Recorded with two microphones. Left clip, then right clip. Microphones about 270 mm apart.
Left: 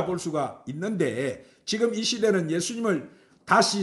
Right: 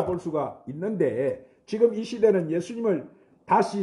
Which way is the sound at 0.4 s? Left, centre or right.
Left.